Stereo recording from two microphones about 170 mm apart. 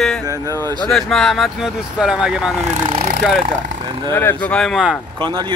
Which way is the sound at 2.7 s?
40° right (ahead or behind).